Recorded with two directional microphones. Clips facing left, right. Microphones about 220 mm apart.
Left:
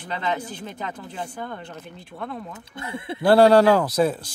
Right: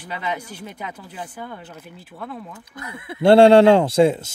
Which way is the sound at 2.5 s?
25° left (ahead or behind).